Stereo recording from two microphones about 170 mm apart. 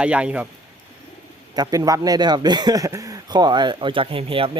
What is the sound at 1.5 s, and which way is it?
Speech, 20° right (ahead or behind).